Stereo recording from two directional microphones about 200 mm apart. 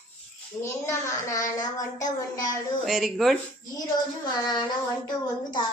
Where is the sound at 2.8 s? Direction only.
Centre (ahead or behind).